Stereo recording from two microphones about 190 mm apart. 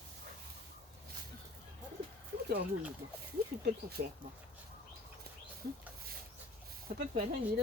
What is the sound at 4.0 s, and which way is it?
Speech, 55° right (ahead or behind).